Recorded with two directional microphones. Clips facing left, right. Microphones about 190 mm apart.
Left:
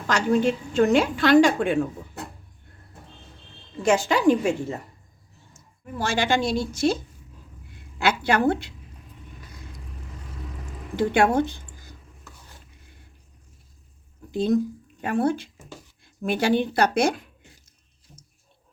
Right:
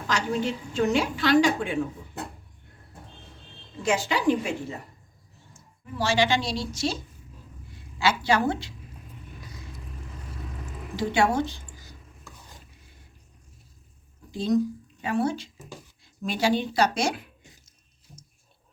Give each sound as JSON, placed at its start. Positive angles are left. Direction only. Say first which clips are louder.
{"t": 0.1, "sound": "a woman's voice", "louder": "left 6 dB", "side_deg": 55}
{"t": 3.8, "sound": "a woman's voice", "louder": "left 5 dB", "side_deg": 45}
{"t": 5.8, "sound": "a woman's voice", "louder": "right 1 dB", "side_deg": 50}
{"t": 10.9, "sound": "speech", "louder": "left 4 dB", "side_deg": 55}
{"t": 14.3, "sound": "speech", "louder": "left 2 dB", "side_deg": 55}